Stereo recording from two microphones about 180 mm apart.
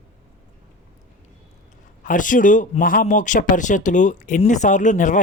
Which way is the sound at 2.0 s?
45° left (ahead or behind).